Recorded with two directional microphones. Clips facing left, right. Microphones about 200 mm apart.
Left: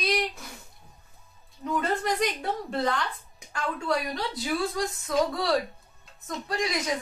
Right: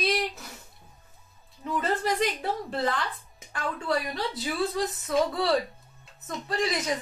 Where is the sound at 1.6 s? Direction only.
Centre (ahead or behind).